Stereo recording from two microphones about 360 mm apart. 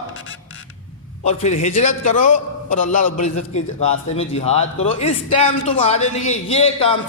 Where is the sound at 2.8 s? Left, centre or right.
Left.